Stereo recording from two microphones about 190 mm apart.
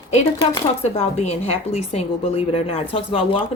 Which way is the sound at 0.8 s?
35° left (ahead or behind).